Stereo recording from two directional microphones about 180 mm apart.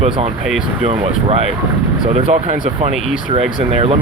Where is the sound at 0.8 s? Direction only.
35° right (ahead or behind).